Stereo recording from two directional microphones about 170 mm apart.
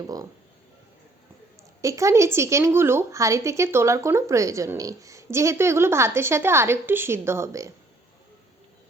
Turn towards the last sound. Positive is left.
turn(degrees=-15)  # may be behind; listen again after turning